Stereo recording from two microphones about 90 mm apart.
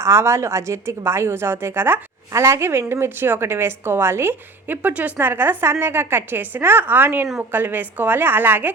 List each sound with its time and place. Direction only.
0.0 s a woman's voice: 30° right (ahead or behind)